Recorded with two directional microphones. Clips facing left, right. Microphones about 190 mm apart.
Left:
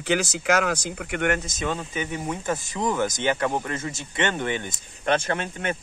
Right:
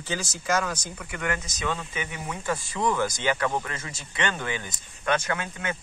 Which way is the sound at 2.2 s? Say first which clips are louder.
Left 3 dB; 20° left (ahead or behind).